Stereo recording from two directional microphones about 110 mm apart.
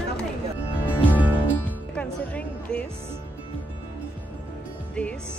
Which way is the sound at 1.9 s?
10° left (ahead or behind).